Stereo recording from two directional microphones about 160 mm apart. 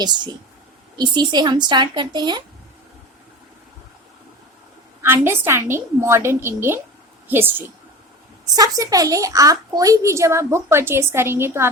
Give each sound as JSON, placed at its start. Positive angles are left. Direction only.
{"t": 0.0, "sound": "speech", "side_deg": -25}
{"t": 5.0, "sound": "a woman's voice", "side_deg": -15}
{"t": 8.5, "sound": "a woman's voice", "side_deg": -20}